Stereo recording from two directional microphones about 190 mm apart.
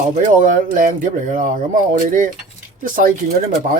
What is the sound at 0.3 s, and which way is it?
Speech, 40° right (ahead or behind).